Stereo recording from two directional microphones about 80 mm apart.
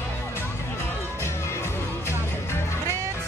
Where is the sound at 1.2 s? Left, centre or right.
Left.